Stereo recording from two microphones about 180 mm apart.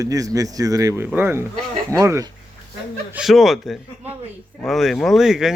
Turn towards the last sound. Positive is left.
turn(degrees=0)  # may be behind; listen again after turning